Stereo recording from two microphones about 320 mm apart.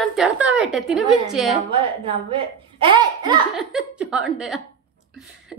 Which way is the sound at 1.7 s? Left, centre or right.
Centre.